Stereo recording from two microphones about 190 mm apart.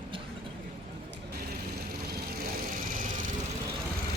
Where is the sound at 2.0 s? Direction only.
55° right (ahead or behind).